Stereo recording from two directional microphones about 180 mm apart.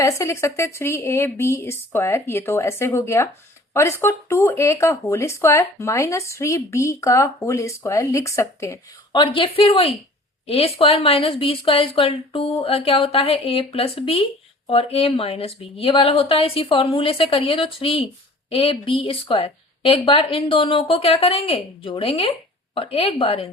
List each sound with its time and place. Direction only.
0.0 s speech: 15° left (ahead or behind)